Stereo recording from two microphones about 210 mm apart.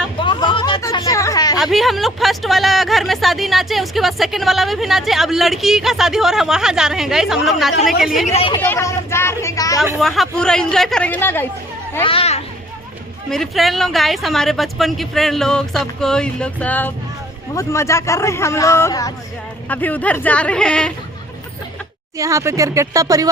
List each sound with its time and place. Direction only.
0.2 s a sound: 20° left (ahead or behind)
1.5 s speech: centre (ahead or behind)
8.4 s speech: 25° left (ahead or behind)
8.6 s a sound: 10° left (ahead or behind)
10.0 s speech: centre (ahead or behind)
12.0 s speech: 30° left (ahead or behind)
13.3 s speech: centre (ahead or behind)
22.2 s speech: 15° right (ahead or behind)